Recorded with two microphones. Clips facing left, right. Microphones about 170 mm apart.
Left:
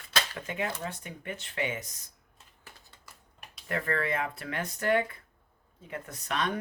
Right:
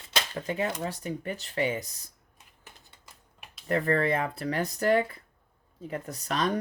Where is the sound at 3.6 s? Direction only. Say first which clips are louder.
Right 6 dB; 35° right (ahead or behind).